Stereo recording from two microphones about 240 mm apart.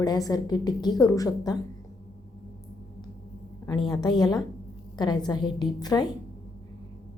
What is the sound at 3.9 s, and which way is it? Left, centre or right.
A woman's voice, centre.